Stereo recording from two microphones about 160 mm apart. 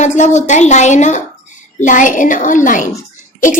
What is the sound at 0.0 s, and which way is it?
A woman's voice, 50° left (ahead or behind).